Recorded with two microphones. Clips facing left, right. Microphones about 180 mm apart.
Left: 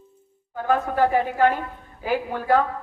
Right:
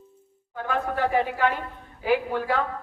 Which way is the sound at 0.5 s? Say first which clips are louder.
Left 5 dB; 45° left (ahead or behind).